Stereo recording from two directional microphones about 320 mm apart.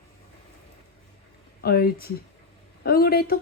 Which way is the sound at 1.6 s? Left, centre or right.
Left.